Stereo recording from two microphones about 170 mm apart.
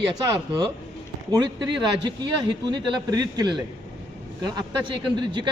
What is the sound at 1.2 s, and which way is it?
Speech, 25° right (ahead or behind).